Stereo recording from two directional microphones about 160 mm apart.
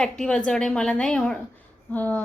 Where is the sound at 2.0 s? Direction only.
10° left (ahead or behind).